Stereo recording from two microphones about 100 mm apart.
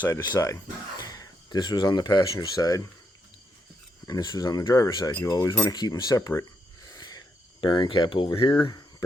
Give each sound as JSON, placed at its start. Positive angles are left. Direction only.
{"t": 0.3, "sound": "speech", "side_deg": 35}
{"t": 4.0, "sound": "speech", "side_deg": 40}
{"t": 6.8, "sound": "wheeze", "side_deg": 40}
{"t": 7.6, "sound": "speech", "side_deg": 55}